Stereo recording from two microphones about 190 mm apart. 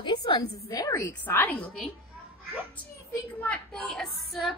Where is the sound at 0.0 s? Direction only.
20° left (ahead or behind).